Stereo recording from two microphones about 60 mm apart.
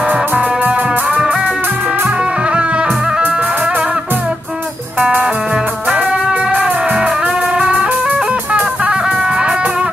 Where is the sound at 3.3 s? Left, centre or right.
Centre.